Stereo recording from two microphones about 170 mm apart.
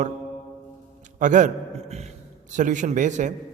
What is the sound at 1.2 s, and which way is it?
A man's voice, 50° right (ahead or behind).